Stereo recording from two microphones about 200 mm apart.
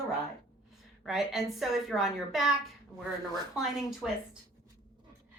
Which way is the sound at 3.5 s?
Centre (ahead or behind).